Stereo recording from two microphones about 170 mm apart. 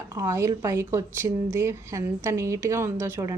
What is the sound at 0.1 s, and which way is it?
A woman's voice, 20° right (ahead or behind).